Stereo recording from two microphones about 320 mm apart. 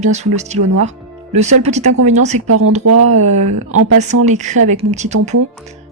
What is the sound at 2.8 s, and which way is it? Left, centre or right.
Speech, right.